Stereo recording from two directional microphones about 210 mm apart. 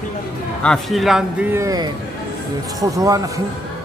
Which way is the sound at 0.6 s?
Centre (ahead or behind).